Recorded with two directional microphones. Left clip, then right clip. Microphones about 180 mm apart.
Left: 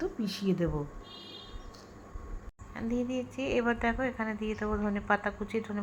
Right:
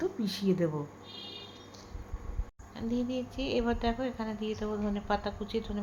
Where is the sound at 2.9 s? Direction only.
40° left (ahead or behind).